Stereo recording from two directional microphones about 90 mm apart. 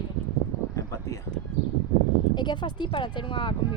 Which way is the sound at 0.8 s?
35° left (ahead or behind).